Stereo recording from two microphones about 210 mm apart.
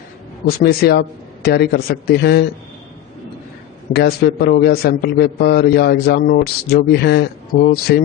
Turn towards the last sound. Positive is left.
turn(degrees=50)  # may be behind; listen again after turning